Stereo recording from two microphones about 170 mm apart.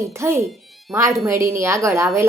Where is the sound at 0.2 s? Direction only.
15° right (ahead or behind).